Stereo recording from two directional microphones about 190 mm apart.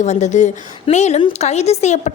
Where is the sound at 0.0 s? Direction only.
35° left (ahead or behind).